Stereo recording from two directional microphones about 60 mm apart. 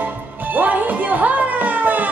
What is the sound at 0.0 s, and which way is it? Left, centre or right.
Music, right.